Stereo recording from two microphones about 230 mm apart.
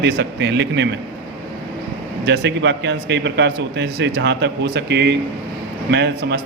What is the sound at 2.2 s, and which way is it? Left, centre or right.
A man's voice, right.